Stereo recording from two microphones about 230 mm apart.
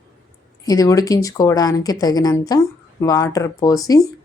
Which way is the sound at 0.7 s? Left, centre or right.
Centre.